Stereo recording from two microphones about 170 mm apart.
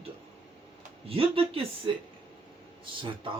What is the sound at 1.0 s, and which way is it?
Speech, 35° right (ahead or behind).